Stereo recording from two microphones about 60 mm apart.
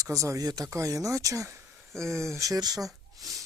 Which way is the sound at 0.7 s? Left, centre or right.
Right.